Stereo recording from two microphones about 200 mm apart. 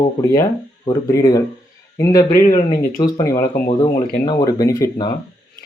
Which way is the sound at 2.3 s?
45° left (ahead or behind).